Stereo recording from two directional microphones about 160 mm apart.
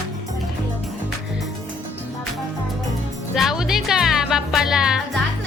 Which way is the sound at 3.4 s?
Centre (ahead or behind).